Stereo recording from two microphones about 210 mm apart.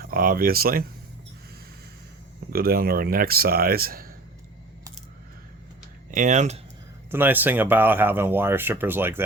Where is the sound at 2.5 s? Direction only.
45° right (ahead or behind).